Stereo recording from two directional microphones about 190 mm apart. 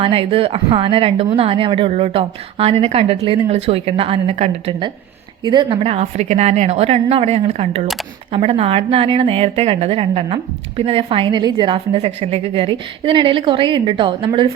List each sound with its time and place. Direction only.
0.0 s a woman's voice: 30° right (ahead or behind)
5.4 s a woman's voice: 25° right (ahead or behind)